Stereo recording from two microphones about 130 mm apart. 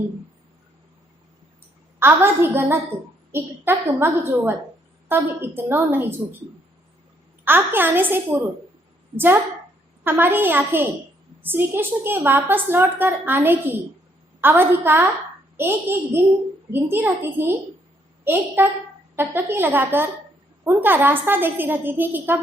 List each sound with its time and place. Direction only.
2.0 s a woman's voice: 15° right (ahead or behind)
7.4 s a woman's voice: 15° right (ahead or behind)